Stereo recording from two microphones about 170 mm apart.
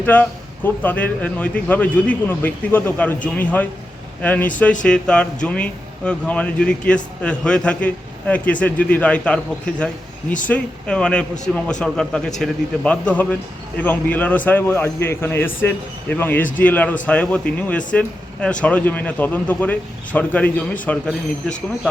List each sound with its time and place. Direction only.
0.0 s a man's voice: 10° left (ahead or behind)